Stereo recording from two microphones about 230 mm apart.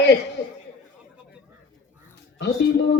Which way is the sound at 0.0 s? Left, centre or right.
Left.